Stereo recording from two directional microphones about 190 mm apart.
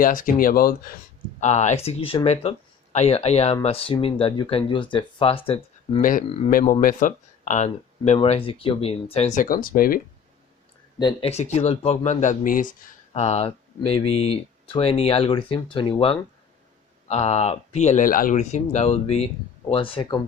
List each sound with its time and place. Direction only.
0.0 s speech: 45° left (ahead or behind)
1.4 s speech: 35° left (ahead or behind)
6.0 s speech: 45° left (ahead or behind)
11.0 s speech: 30° left (ahead or behind)
13.1 s speech: 35° left (ahead or behind)